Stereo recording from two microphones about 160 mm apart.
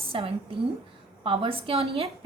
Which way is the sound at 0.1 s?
35° right (ahead or behind).